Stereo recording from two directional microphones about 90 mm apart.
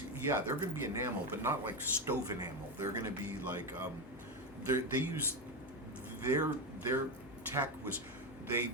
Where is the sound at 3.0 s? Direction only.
25° right (ahead or behind).